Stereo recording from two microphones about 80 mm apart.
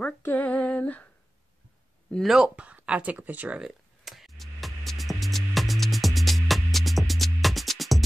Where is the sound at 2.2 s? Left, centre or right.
Centre.